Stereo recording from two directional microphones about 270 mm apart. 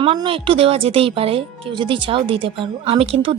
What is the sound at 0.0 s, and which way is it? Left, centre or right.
Speech, centre.